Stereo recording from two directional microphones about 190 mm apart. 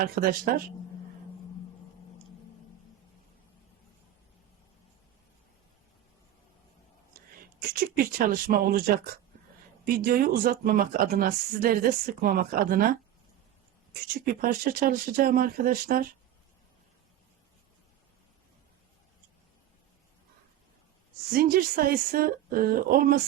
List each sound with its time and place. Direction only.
0.0 s speech: 50° right (ahead or behind)
7.9 s speech: 50° right (ahead or behind)
14.3 s speech: 50° right (ahead or behind)
21.3 s speech: 50° right (ahead or behind)